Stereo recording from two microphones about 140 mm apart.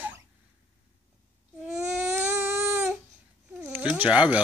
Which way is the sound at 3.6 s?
10° right (ahead or behind).